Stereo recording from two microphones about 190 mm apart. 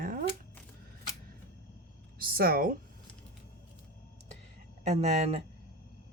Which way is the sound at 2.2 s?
50° right (ahead or behind).